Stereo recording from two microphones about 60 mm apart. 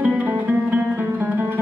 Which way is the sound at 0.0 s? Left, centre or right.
Right.